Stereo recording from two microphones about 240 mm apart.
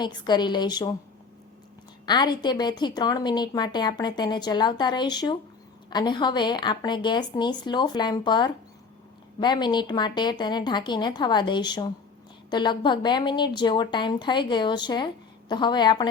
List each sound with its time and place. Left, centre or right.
0.0 s a woman's voice: centre
2.0 s a woman's voice: centre